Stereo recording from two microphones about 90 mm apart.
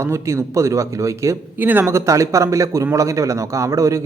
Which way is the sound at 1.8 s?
35° right (ahead or behind).